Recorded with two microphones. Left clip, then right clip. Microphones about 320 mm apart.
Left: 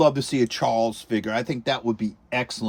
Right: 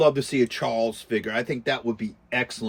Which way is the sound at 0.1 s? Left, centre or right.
Centre.